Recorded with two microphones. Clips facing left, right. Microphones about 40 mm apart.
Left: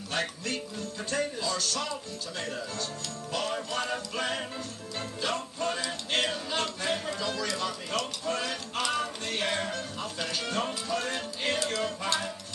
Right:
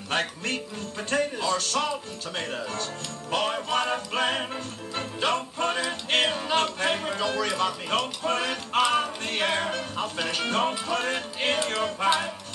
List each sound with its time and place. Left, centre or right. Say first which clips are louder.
0.1 s speech: right 4 dB; right
4.9 s music: right 6 dB; right
5.9 s speech: right 5 dB; right
8.2 s music: right 5 dB; right